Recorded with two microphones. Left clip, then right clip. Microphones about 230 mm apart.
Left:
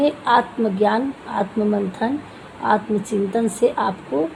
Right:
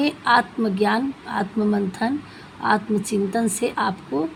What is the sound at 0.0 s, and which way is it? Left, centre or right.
A woman's voice, right.